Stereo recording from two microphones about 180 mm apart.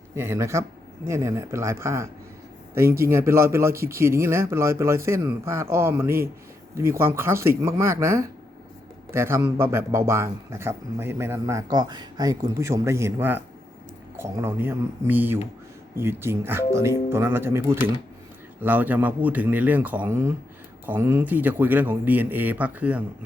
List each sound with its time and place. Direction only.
0.2 s speech: 15° right (ahead or behind)